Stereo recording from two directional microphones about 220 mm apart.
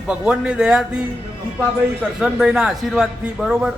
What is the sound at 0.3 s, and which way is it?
Speech, 5° right (ahead or behind).